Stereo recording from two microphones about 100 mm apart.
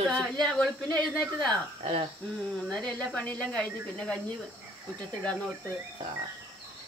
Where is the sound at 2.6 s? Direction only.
10° left (ahead or behind).